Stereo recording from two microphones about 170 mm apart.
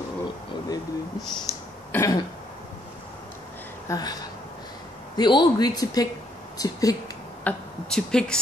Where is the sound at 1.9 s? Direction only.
15° left (ahead or behind).